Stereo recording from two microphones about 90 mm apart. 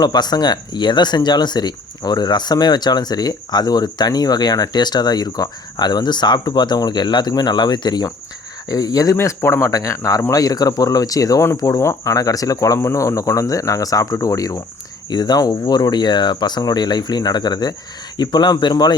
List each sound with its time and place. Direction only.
0.0 s speech: 50° left (ahead or behind)
9.1 s speech: 30° left (ahead or behind); by 18.9 s 50° left (ahead or behind)